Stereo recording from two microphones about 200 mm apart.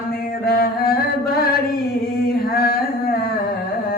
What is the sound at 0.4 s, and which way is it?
Chant, 50° left (ahead or behind).